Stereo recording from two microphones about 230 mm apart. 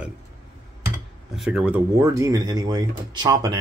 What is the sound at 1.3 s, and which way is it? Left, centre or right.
Speech, centre.